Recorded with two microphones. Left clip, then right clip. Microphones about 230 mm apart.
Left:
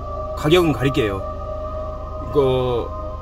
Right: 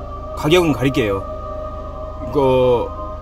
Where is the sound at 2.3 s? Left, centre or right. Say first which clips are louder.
Right 4 dB; centre.